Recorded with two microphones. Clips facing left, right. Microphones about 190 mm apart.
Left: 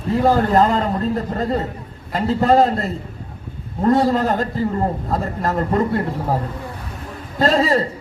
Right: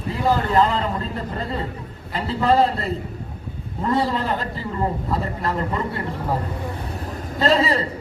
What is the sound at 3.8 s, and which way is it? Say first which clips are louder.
A man's voice: left 6 dB; 45° left (ahead or behind).